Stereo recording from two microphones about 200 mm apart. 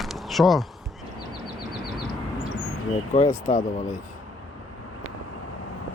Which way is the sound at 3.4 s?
40° left (ahead or behind).